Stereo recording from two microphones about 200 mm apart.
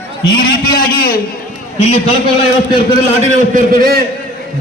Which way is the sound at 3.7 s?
50° right (ahead or behind).